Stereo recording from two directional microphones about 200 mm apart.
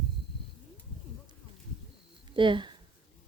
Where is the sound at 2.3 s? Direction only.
25° right (ahead or behind).